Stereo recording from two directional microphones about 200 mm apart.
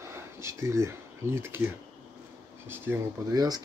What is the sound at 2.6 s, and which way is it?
Speech, 10° right (ahead or behind).